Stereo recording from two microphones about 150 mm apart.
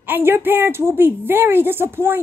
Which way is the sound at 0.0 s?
15° right (ahead or behind).